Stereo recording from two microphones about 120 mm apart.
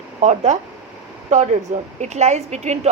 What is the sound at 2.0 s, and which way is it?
Speech, 70° right (ahead or behind).